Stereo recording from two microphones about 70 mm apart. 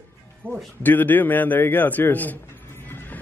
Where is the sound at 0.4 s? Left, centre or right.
Right.